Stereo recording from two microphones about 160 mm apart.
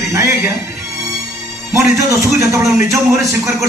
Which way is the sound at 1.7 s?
20° right (ahead or behind).